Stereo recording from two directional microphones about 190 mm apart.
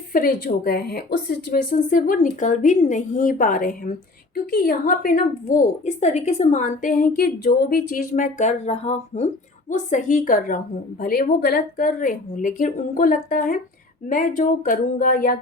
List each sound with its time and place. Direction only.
0.1 s a woman's voice: 50° left (ahead or behind)